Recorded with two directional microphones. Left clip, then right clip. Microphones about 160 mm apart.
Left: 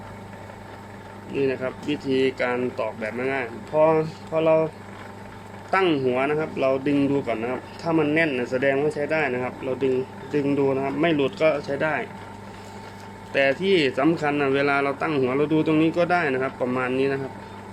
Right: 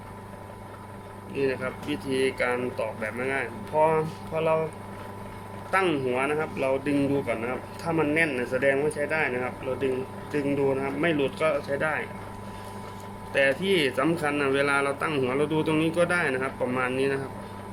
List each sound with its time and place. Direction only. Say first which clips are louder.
1.3 s speech: left 3 dB; 45° left (ahead or behind)
5.7 s speech: left 4 dB; 45° left (ahead or behind)
13.3 s speech: left 3 dB; 45° left (ahead or behind)